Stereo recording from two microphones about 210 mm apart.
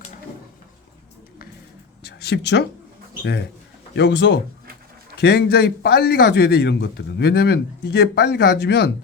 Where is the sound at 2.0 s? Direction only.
50° left (ahead or behind).